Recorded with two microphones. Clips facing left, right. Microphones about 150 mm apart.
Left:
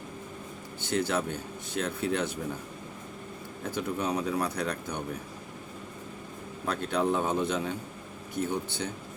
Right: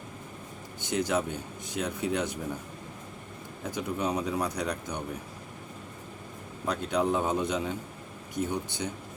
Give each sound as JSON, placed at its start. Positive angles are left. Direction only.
{"t": 0.8, "sound": "speech", "side_deg": -15}
{"t": 3.6, "sound": "speech", "side_deg": -15}
{"t": 6.7, "sound": "speech", "side_deg": -15}